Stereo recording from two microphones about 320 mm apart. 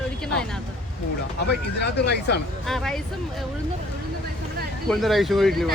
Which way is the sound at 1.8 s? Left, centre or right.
Left.